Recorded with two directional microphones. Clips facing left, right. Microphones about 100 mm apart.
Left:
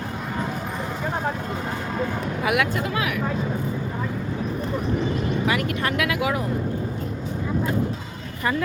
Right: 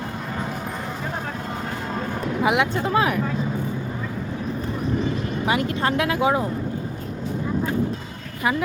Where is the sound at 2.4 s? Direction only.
25° right (ahead or behind).